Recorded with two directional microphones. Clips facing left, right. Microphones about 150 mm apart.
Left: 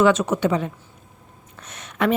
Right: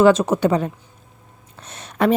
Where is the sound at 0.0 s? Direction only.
35° right (ahead or behind).